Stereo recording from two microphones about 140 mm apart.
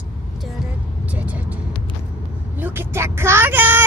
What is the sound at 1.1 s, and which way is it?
Vehicle, 10° right (ahead or behind).